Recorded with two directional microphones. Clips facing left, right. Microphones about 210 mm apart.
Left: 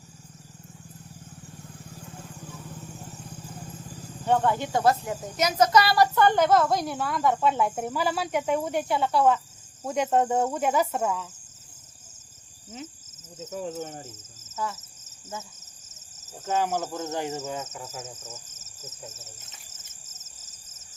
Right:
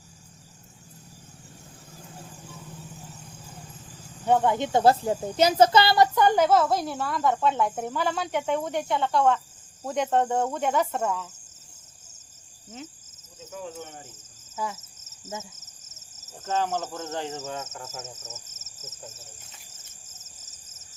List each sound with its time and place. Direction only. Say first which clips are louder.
4.3 s speech: right 2 dB; 15° right (ahead or behind)
6.1 s speech: even; 10° right (ahead or behind); by 9.4 s 5° left (ahead or behind)
9.8 s cricket: left 1 dB; 5° left (ahead or behind)
13.4 s speech: left 5 dB; 45° left (ahead or behind)
14.5 s speech: even; 15° right (ahead or behind)
15.3 s cricket: right 2 dB; 15° left (ahead or behind)
18.2 s speech: left 1 dB; 10° left (ahead or behind)
19.1 s speech: left 1 dB; centre (ahead or behind)